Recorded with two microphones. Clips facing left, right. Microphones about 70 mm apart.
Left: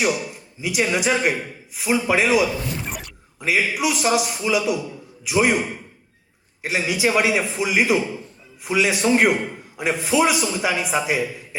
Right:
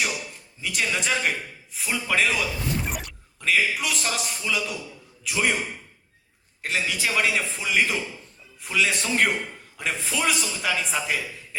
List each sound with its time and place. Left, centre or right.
0.0 s a man's voice: centre
6.6 s a man's voice: centre